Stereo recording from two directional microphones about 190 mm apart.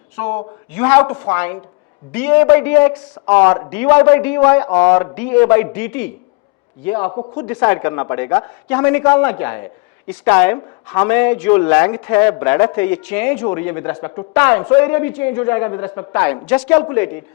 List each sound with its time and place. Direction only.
0.2 s a woman's voice: 10° left (ahead or behind)
7.1 s speech: 25° left (ahead or behind)
7.4 s a woman's voice: 10° left (ahead or behind)